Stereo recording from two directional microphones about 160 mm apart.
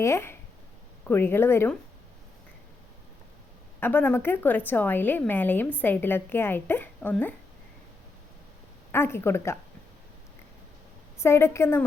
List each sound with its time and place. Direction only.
0.0 s a woman's voice: 15° left (ahead or behind)
3.8 s a woman's voice: 10° left (ahead or behind)
8.9 s a woman's voice: 15° left (ahead or behind)
11.2 s a woman's voice: 15° left (ahead or behind)